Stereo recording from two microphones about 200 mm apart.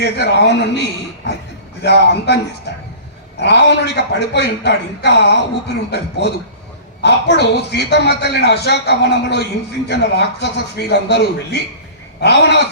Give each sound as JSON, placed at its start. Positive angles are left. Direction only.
{"t": 0.0, "sound": "a man's voice", "side_deg": 60}
{"t": 3.4, "sound": "a man's voice", "side_deg": 60}